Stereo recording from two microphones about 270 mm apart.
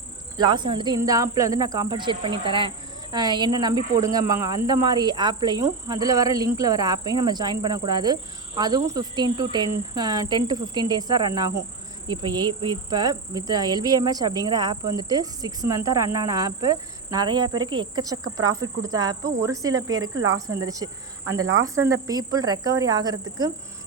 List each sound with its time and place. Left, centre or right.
0.3 s speech: centre
20.0 s cricket: right
20.7 s speech: centre
21.2 s cricket: right
22.0 s speech: centre